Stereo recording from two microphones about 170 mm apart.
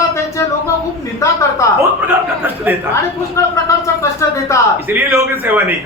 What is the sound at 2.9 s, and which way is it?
A man's voice, 20° left (ahead or behind).